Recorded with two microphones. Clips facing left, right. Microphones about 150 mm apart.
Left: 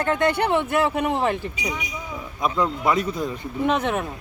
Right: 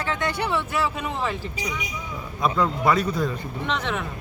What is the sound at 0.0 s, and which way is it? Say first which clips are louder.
A man's voice: left 6 dB; 55° left (ahead or behind).